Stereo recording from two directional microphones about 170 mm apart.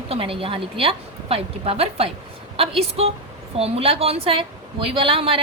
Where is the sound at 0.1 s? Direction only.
35° right (ahead or behind).